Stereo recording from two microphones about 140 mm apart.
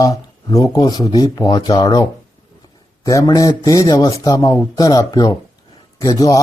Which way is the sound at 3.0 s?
25° left (ahead or behind).